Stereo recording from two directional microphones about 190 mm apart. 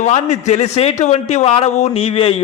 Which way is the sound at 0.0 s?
35° left (ahead or behind).